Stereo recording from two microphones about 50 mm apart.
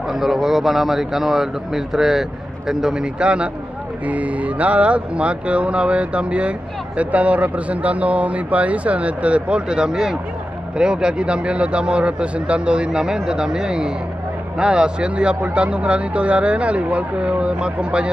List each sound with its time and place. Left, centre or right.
0.1 s a man's voice: centre